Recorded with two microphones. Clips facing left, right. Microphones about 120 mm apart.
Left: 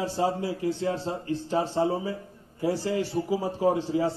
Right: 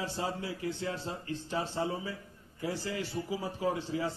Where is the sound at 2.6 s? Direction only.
20° left (ahead or behind).